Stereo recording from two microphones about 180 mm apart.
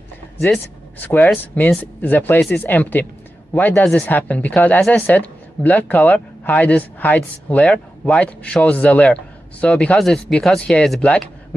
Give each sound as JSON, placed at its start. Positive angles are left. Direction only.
{"t": 0.4, "sound": "speech", "side_deg": 10}